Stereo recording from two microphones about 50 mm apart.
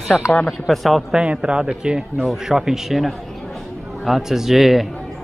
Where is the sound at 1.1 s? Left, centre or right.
Right; by 4.8 s centre.